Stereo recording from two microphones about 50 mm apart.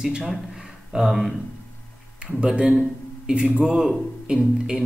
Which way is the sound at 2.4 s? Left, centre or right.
Centre.